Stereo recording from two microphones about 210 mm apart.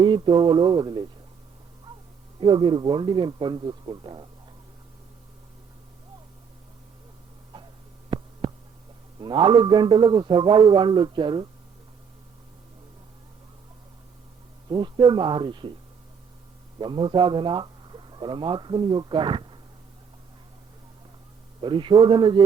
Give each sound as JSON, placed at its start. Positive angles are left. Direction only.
{"t": 0.0, "sound": "a man's voice", "side_deg": -20}
{"t": 2.4, "sound": "a man's voice", "side_deg": -20}
{"t": 9.2, "sound": "a man's voice", "side_deg": -20}
{"t": 14.7, "sound": "a man's voice", "side_deg": -20}
{"t": 16.8, "sound": "speech", "side_deg": -25}
{"t": 21.6, "sound": "a man's voice", "side_deg": -20}